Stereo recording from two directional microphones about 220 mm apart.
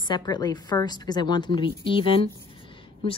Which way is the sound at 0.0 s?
20° left (ahead or behind).